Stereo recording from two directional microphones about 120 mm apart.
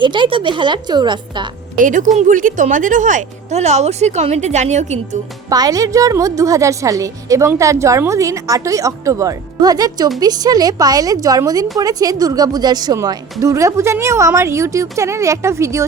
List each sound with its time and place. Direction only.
0.0 s speech: 45° right (ahead or behind)
1.8 s speech: 90° right; by 4.9 s 75° right (ahead or behind)
5.5 s a woman's voice: 30° right (ahead or behind)